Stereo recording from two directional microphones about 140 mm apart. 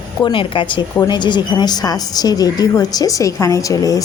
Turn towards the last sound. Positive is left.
turn(degrees=25)  # may be behind; listen again after turning